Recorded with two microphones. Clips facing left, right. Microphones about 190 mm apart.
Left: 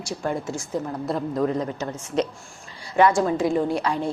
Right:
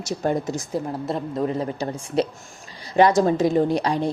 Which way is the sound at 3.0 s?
30° right (ahead or behind).